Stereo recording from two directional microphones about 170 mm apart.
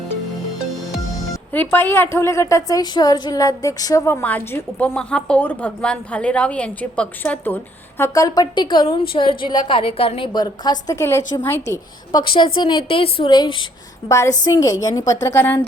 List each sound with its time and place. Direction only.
1.5 s a woman's voice: 15° left (ahead or behind)
11.7 s a woman's voice: 25° left (ahead or behind)
14.1 s a woman's voice: 15° left (ahead or behind)